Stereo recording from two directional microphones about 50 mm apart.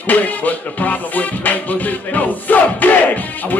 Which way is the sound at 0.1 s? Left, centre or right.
Left.